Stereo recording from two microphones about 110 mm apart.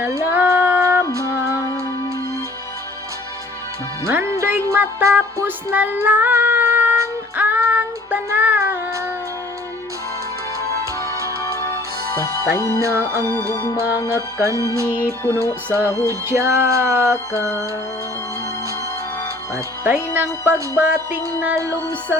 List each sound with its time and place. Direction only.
0.0 s music: 20° right (ahead or behind)
4.0 s music: 25° right (ahead or behind)
5.7 s female singing: 15° right (ahead or behind)
12.1 s music: 30° left (ahead or behind)
12.8 s music: 20° right (ahead or behind)
19.8 s music: 20° right (ahead or behind)